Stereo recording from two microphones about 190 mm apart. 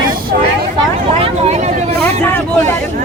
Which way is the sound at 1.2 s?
35° right (ahead or behind).